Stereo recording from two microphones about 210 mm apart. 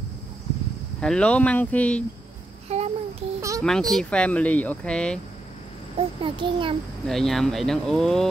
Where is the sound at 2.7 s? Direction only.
30° right (ahead or behind).